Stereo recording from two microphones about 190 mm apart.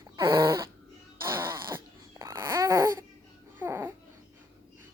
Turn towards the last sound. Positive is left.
turn(degrees=-10)  # may be behind; listen again after turning